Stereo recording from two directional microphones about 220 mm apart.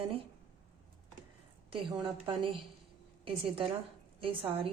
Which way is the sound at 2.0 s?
25° right (ahead or behind).